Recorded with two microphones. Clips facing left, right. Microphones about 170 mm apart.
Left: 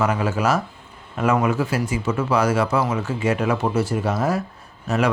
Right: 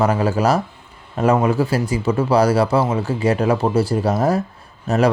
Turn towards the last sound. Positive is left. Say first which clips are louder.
# right 4 dB
turn(degrees=-35)  # may be behind; listen again after turning